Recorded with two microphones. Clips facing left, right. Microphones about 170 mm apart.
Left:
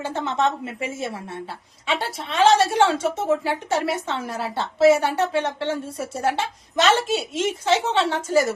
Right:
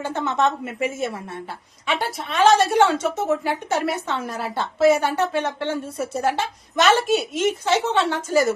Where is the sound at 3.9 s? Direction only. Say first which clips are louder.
Even; 25° left (ahead or behind).